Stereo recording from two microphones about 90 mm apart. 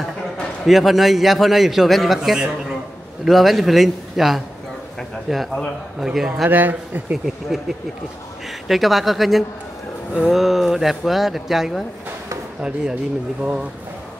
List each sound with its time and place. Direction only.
0.7 s a man's voice: centre (ahead or behind)
6.4 s speech: 20° right (ahead or behind)
7.2 s a man's voice: centre (ahead or behind)
13.4 s speech: 15° right (ahead or behind)